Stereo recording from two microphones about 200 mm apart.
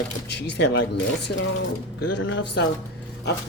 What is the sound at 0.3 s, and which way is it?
Speech, 60° left (ahead or behind).